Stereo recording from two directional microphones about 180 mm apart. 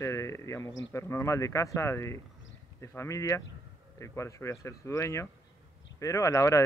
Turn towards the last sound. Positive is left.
turn(degrees=15)  # may be behind; listen again after turning